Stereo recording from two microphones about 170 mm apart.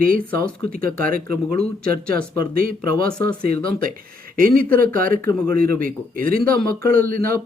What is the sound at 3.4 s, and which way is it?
Speech, 60° right (ahead or behind).